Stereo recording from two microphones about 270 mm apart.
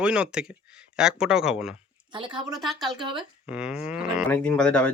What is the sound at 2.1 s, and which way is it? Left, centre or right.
A woman's voice, centre.